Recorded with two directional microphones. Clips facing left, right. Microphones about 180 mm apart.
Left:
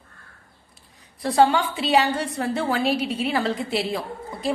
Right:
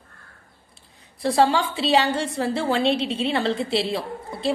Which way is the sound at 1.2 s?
30° right (ahead or behind).